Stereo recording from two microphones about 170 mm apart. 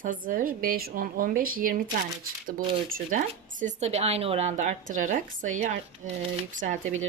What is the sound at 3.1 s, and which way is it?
A woman's voice, 50° right (ahead or behind).